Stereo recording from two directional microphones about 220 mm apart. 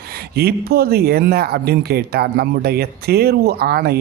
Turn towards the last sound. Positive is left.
turn(degrees=-45)  # may be behind; listen again after turning